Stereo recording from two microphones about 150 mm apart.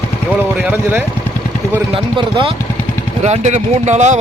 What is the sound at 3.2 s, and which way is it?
Speech, 50° right (ahead or behind).